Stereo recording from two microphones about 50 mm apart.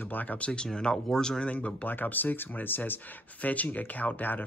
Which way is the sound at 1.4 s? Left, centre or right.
Left.